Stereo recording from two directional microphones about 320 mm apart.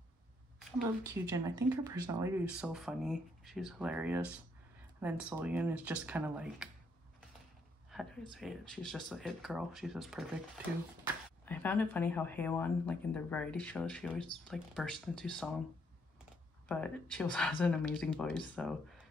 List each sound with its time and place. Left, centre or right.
1.0 s speech: centre
7.9 s speech: centre
11.4 s speech: centre
16.6 s speech: centre